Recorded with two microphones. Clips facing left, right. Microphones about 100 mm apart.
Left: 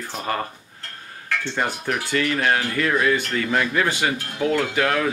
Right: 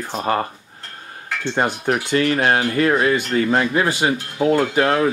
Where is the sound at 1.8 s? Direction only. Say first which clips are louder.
Right 6 dB; 35° right (ahead or behind).